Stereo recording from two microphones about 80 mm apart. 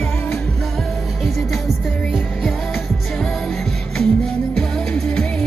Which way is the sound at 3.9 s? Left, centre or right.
Centre.